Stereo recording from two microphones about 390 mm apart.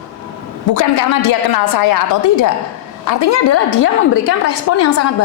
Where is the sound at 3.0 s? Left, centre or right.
Left.